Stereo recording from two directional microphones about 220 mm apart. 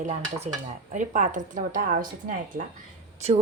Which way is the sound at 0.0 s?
30° right (ahead or behind).